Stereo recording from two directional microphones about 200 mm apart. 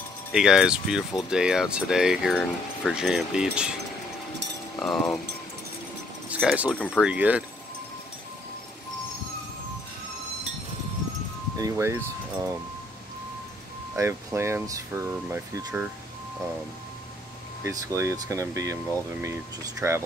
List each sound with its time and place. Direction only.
0.3 s speech: centre (ahead or behind)
4.7 s speech: 5° left (ahead or behind)
6.2 s keys jangling: 5° right (ahead or behind)
6.7 s speech: 5° left (ahead or behind)
11.5 s speech: 15° right (ahead or behind)
13.9 s speech: 15° right (ahead or behind)
17.6 s speech: 15° right (ahead or behind)